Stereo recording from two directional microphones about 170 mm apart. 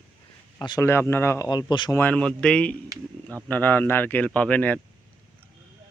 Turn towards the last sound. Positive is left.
turn(degrees=10)  # may be behind; listen again after turning